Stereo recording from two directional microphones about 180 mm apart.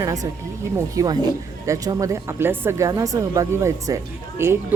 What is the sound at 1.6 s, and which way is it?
Speech, 20° right (ahead or behind).